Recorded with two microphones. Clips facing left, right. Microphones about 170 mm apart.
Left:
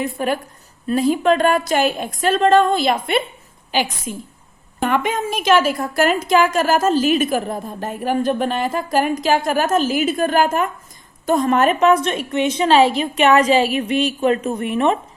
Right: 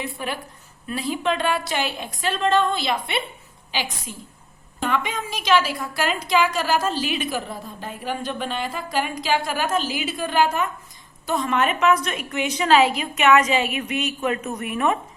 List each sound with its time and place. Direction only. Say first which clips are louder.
0.0 s a woman's voice: left 8 dB; 45° left (ahead or behind); by 14.9 s 30° left (ahead or behind)